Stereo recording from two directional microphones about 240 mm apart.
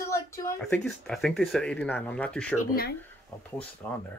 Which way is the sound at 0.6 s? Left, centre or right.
Centre.